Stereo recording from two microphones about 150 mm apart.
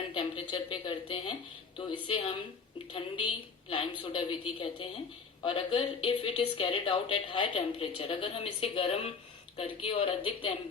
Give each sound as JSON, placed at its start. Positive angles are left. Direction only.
{"t": 0.1, "sound": "a woman's voice", "side_deg": 35}